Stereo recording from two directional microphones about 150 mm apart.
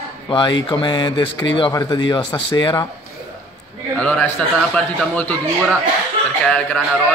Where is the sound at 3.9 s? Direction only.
5° left (ahead or behind).